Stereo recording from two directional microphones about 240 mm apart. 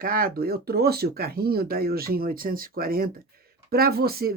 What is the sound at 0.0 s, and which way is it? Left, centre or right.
Speech, right.